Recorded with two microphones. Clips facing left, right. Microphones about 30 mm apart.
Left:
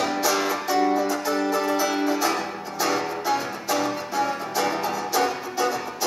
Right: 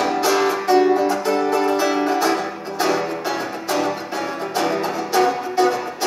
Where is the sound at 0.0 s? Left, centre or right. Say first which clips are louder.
Right 5 dB; right.